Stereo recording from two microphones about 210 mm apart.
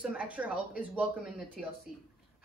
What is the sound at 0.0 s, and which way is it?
Speech, 5° right (ahead or behind).